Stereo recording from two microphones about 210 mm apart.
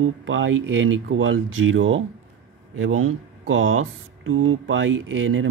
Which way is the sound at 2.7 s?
75° right (ahead or behind).